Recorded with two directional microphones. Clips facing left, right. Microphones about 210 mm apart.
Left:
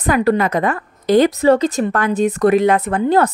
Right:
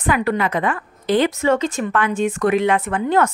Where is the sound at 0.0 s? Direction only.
40° left (ahead or behind).